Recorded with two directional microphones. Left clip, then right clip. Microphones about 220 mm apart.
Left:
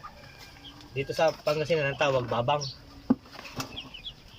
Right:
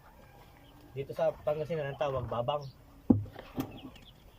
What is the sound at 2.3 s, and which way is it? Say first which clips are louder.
Speech: left 6 dB; 15° left (ahead or behind).